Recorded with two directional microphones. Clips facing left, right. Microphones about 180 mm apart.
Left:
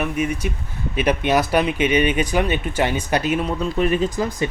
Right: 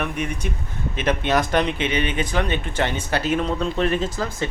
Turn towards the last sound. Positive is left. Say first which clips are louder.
# left 4 dB
turn(degrees=15)  # may be behind; listen again after turning